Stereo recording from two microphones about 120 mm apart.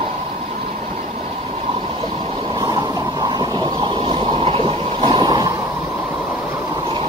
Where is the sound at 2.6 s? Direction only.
30° right (ahead or behind).